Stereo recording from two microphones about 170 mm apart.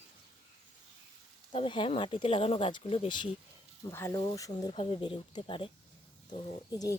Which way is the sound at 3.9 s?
15° left (ahead or behind).